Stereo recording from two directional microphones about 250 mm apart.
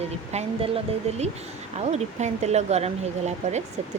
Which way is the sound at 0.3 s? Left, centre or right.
Right.